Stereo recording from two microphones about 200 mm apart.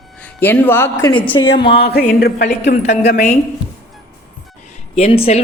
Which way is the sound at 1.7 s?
55° left (ahead or behind).